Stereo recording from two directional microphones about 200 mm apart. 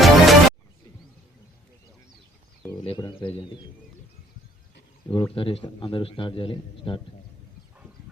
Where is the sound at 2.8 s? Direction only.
25° left (ahead or behind).